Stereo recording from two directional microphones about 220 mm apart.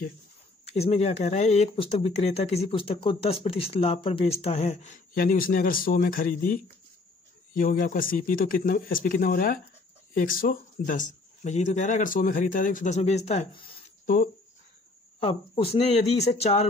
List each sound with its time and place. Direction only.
0.7 s speech: 30° left (ahead or behind)
14.0 s speech: 40° left (ahead or behind)
15.1 s speech: 25° left (ahead or behind)